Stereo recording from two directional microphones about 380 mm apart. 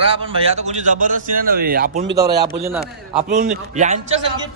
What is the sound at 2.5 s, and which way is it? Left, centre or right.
Speech, centre.